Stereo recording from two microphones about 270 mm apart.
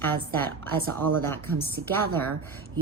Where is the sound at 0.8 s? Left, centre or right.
Right.